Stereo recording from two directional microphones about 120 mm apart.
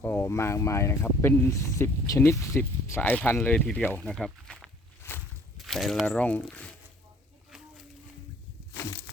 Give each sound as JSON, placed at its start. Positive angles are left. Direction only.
{"t": 0.0, "sound": "speech", "side_deg": 20}
{"t": 4.1, "sound": "speech", "side_deg": 5}
{"t": 5.0, "sound": "a sound", "side_deg": 20}
{"t": 5.5, "sound": "speech", "side_deg": 0}
{"t": 6.1, "sound": "speech", "side_deg": 10}
{"t": 8.7, "sound": "a sound", "side_deg": 25}